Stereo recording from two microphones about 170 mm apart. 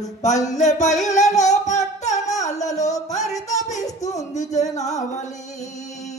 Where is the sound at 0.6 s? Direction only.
45° left (ahead or behind).